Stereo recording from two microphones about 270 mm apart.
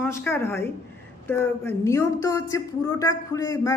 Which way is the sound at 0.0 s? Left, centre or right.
Centre.